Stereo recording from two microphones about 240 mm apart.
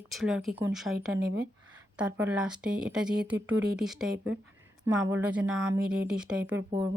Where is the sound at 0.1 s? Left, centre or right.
Centre.